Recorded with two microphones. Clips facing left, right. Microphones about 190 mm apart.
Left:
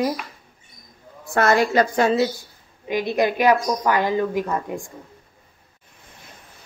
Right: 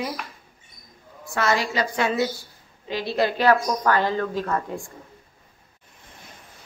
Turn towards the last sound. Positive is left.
turn(degrees=15)  # may be behind; listen again after turning